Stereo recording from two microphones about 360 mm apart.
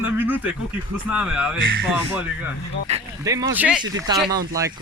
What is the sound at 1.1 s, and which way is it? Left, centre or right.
Speech, centre.